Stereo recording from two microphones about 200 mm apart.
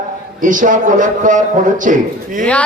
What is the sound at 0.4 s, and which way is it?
A man's voice, 40° right (ahead or behind).